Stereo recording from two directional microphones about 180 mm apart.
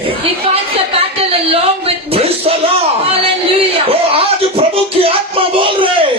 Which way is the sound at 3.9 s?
30° right (ahead or behind).